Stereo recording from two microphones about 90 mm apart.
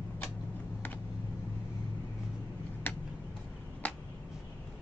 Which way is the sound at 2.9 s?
20° left (ahead or behind).